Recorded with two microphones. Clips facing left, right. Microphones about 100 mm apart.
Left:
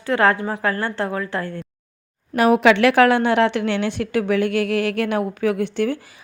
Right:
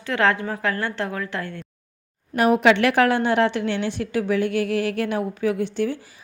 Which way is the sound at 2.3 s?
90° left.